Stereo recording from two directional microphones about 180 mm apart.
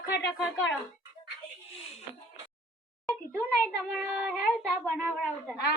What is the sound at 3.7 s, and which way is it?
Child singing, 10° right (ahead or behind).